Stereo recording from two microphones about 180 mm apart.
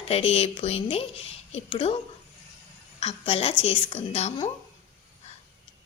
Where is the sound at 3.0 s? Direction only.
35° left (ahead or behind).